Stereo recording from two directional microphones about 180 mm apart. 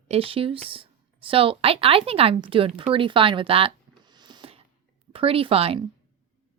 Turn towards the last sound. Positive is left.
turn(degrees=-30)  # may be behind; listen again after turning